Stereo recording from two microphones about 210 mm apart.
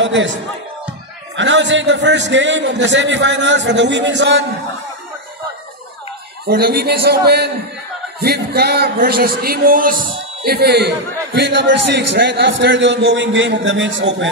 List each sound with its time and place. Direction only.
0.0 s speech: 60° right (ahead or behind)
1.3 s a man's voice: 60° right (ahead or behind)
6.4 s a man's voice: 50° right (ahead or behind)